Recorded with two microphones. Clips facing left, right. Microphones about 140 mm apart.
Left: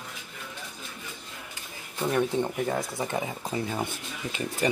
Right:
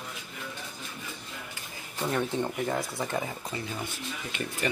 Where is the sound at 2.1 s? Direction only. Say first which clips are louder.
Left 3 dB; 15° left (ahead or behind).